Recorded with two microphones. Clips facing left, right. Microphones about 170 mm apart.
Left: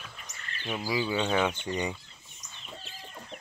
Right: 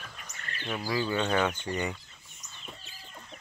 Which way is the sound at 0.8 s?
10° left (ahead or behind).